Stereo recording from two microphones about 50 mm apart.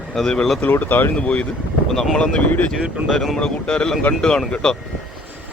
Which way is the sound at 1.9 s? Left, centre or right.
Centre.